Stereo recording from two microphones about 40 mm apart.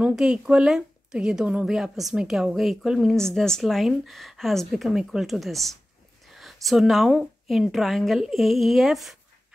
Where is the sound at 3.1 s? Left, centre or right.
Centre.